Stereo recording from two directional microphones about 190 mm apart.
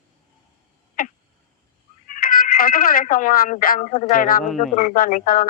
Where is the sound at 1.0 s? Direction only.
50° left (ahead or behind).